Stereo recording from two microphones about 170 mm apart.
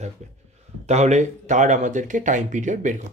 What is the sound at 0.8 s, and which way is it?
Speech, 40° right (ahead or behind).